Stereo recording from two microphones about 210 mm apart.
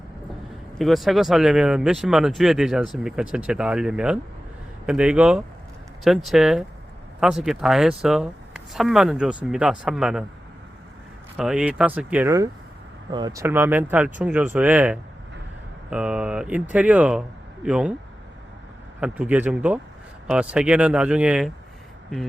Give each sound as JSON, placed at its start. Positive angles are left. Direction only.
{"t": 0.8, "sound": "speech", "side_deg": 0}
{"t": 11.3, "sound": "speech", "side_deg": -5}
{"t": 18.9, "sound": "speech", "side_deg": -5}